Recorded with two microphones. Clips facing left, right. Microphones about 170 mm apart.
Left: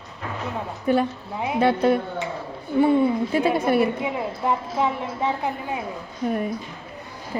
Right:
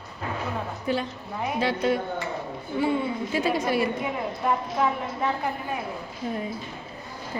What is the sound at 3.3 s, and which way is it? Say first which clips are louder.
Speech: left 4 dB; 55° left (ahead or behind).